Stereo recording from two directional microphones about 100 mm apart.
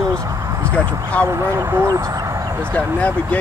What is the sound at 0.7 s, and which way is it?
Speech, 15° left (ahead or behind).